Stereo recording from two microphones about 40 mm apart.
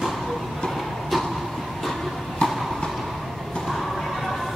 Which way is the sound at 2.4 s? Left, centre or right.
Left.